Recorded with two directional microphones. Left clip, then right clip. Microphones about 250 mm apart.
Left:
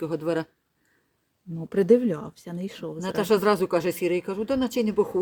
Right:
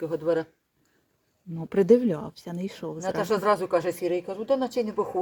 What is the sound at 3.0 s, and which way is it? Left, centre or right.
Speech, left.